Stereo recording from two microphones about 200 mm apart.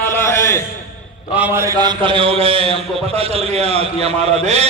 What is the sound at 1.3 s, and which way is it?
A man's voice, 10° right (ahead or behind).